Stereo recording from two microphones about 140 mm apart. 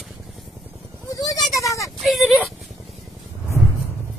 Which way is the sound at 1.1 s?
25° left (ahead or behind).